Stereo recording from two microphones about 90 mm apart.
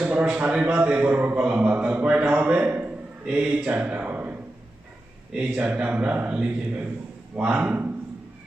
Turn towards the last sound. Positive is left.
turn(degrees=-15)  # may be behind; listen again after turning